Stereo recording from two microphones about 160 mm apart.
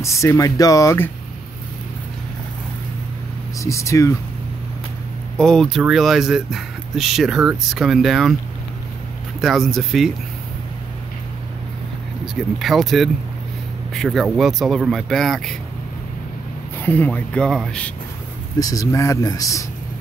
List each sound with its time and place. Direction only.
0.0 s speech: 20° left (ahead or behind)
3.5 s speech: 20° left (ahead or behind)
5.4 s speech: centre (ahead or behind)
9.4 s speech: centre (ahead or behind)
12.5 s speech: centre (ahead or behind)
16.8 s speech: 10° left (ahead or behind)
18.6 s speech: 20° left (ahead or behind)